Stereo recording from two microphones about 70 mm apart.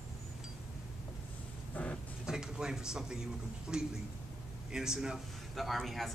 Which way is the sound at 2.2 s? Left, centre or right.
Centre.